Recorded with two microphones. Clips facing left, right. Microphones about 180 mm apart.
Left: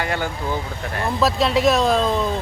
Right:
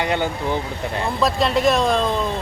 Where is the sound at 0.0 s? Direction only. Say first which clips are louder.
Right 3 dB; 20° right (ahead or behind).